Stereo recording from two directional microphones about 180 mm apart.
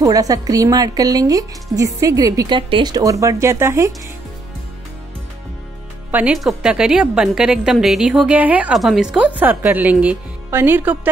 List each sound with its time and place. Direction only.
0.0 s speech: 20° right (ahead or behind)
6.1 s a woman's voice: 5° right (ahead or behind)